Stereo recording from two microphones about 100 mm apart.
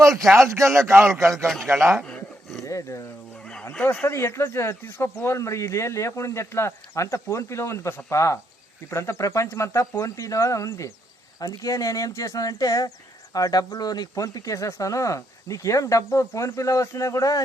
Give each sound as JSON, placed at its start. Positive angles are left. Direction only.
{"t": 0.4, "sound": "speech", "side_deg": -30}
{"t": 1.5, "sound": "a man's voice", "side_deg": 0}
{"t": 2.0, "sound": "dog", "side_deg": 5}
{"t": 2.6, "sound": "speech", "side_deg": 30}
{"t": 3.6, "sound": "speech", "side_deg": 15}
{"t": 4.0, "sound": "speech", "side_deg": 25}